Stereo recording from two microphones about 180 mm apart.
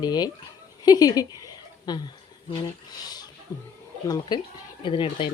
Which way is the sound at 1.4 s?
25° left (ahead or behind).